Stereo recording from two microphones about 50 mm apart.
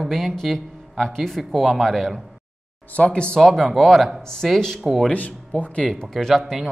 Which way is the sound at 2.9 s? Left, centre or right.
Left.